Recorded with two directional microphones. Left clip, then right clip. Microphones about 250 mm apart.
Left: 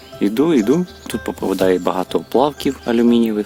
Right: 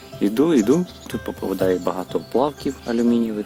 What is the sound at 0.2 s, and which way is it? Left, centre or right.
Speech, centre.